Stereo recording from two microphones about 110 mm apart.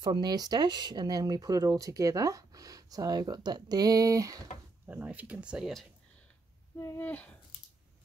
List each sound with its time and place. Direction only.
0.0 s speech: 40° right (ahead or behind)
4.8 s speech: 15° right (ahead or behind)
6.8 s speech: 20° left (ahead or behind)